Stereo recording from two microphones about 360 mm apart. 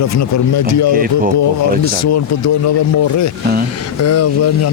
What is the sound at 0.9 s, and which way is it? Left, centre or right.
Speech, right.